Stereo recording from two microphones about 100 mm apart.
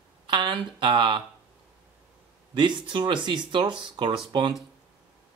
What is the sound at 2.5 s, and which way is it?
Speech, 50° right (ahead or behind).